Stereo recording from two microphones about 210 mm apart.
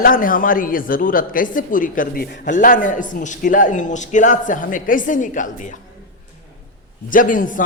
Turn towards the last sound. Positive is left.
turn(degrees=40)  # may be behind; listen again after turning